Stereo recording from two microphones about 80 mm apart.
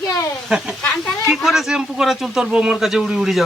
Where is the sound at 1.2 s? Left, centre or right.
Centre.